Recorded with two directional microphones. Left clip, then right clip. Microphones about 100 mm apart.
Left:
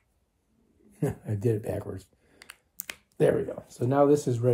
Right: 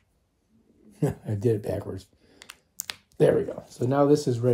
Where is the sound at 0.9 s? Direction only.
20° right (ahead or behind).